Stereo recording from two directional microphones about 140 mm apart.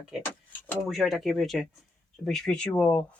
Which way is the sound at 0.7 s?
Centre (ahead or behind).